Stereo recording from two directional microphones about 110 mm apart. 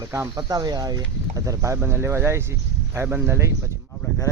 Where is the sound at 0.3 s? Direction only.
35° right (ahead or behind).